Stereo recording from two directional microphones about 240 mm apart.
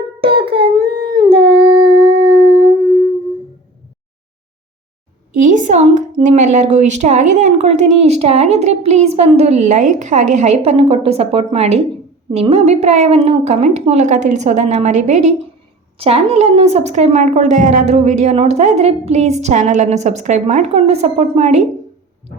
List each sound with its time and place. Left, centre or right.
0.2 s a sound: right
1.2 s humming: right
2.2 s howl: right
5.4 s a woman's voice: right